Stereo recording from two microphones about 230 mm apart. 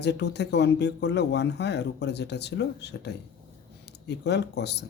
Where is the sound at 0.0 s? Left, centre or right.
Left.